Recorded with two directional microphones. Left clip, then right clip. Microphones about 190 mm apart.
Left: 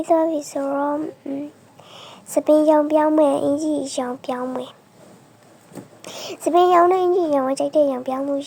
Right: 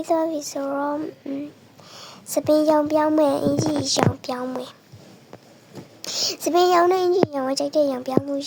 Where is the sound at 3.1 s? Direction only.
15° left (ahead or behind).